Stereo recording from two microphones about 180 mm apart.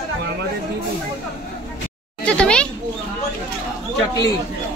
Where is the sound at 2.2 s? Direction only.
5° left (ahead or behind).